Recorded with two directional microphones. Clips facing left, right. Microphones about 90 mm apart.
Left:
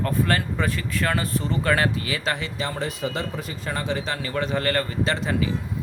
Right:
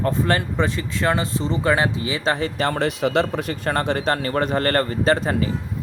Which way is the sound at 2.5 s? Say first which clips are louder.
Right 7 dB; 60° right (ahead or behind).